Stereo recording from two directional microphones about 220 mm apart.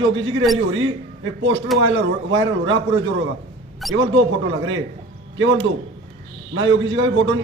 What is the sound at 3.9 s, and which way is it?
Speech, 60° right (ahead or behind).